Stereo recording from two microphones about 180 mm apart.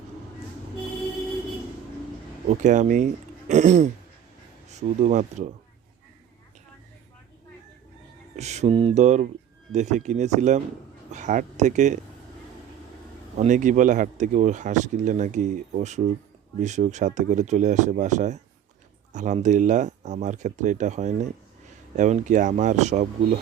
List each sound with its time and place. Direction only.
2.5 s speech: 45° right (ahead or behind)
8.4 s speech: 40° right (ahead or behind)
13.3 s speech: 45° right (ahead or behind)